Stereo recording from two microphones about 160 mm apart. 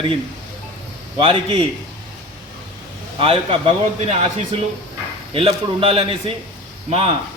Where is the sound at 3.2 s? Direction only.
35° right (ahead or behind).